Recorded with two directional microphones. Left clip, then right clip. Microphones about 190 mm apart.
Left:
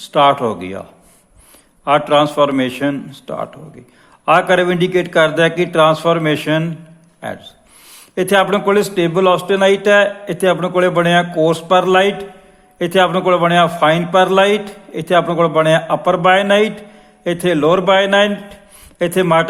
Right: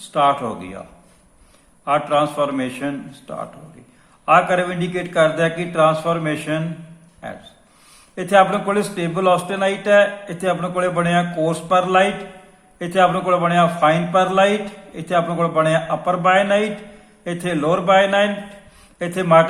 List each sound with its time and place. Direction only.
0.1 s a man's voice: 50° left (ahead or behind)